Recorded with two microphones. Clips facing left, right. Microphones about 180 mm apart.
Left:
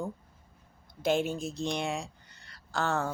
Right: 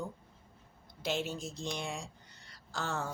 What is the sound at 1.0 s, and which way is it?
Speech, 50° left (ahead or behind).